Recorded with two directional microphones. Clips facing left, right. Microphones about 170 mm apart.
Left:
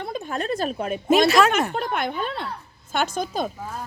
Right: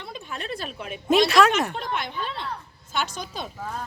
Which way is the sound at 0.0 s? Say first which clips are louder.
Left 7 dB; 45° left (ahead or behind).